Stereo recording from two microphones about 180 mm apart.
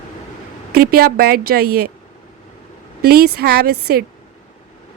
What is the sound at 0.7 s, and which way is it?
Speech, 55° right (ahead or behind).